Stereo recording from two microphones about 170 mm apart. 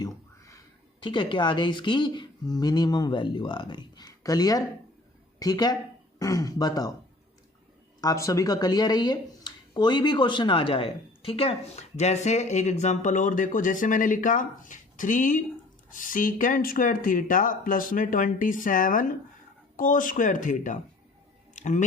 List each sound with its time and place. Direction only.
1.0 s speech: 30° left (ahead or behind)
8.0 s speech: 20° left (ahead or behind); by 20.7 s 50° left (ahead or behind)
21.5 s a sound: 45° left (ahead or behind)